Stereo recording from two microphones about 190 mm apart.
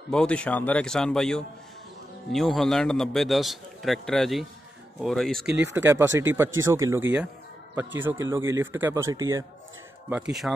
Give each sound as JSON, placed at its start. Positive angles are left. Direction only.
{"t": 0.1, "sound": "a man's voice", "side_deg": 5}
{"t": 5.4, "sound": "speech", "side_deg": -65}
{"t": 5.8, "sound": "speech", "side_deg": -15}
{"t": 10.4, "sound": "speech", "side_deg": 0}